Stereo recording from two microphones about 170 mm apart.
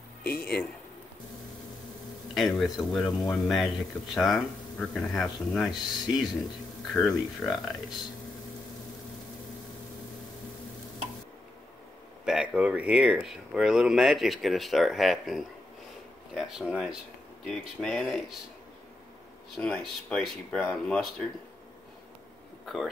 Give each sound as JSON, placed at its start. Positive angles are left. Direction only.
{"t": 0.2, "sound": "a man's voice", "side_deg": 65}
{"t": 2.3, "sound": "a man's voice", "side_deg": 0}
{"t": 6.9, "sound": "a man's voice", "side_deg": 0}
{"t": 12.3, "sound": "a man's voice", "side_deg": -5}
{"t": 19.5, "sound": "a man's voice", "side_deg": 0}